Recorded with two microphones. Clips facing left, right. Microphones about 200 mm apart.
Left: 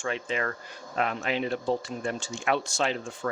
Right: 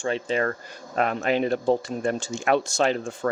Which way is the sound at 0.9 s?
45° right (ahead or behind).